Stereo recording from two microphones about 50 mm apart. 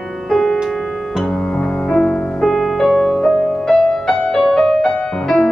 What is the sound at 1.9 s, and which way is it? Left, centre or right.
Music, centre.